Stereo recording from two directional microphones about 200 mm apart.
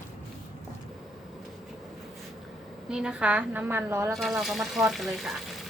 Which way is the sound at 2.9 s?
5° right (ahead or behind).